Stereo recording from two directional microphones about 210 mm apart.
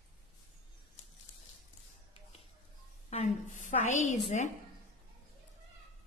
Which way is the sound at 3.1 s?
35° left (ahead or behind).